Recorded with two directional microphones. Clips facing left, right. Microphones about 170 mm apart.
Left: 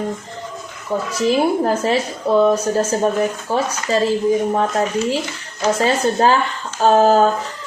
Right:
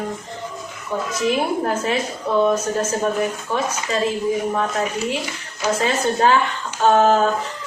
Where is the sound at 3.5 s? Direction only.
35° left (ahead or behind).